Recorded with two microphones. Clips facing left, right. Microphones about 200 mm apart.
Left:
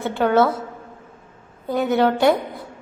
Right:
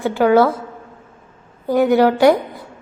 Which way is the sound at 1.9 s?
Centre (ahead or behind).